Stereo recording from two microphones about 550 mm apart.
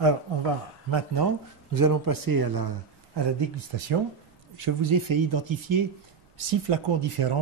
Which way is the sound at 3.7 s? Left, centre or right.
Right.